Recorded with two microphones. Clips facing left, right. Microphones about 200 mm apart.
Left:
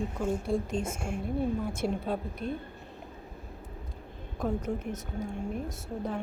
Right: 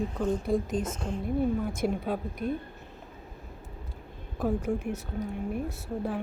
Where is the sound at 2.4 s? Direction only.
30° left (ahead or behind).